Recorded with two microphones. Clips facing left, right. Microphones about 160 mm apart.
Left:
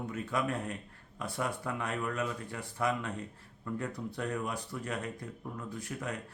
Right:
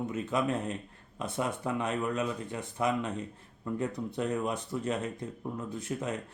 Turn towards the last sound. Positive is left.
turn(degrees=-20)  # may be behind; listen again after turning